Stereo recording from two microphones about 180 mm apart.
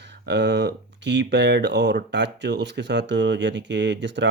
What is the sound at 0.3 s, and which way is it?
Speech, 70° right (ahead or behind).